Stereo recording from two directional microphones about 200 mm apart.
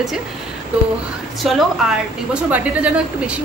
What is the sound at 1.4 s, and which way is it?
Speech, 5° right (ahead or behind).